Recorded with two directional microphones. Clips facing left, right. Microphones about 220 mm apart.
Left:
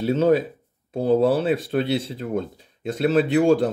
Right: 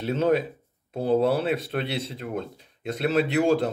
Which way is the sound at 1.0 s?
35° left (ahead or behind).